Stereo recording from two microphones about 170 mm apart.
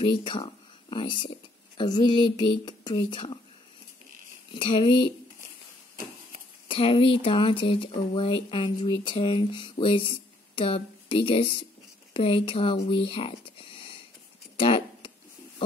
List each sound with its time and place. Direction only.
0.0 s speech: 30° left (ahead or behind)
4.6 s speech: 30° left (ahead or behind)
6.7 s speech: 30° left (ahead or behind)
14.6 s a sound: 30° left (ahead or behind)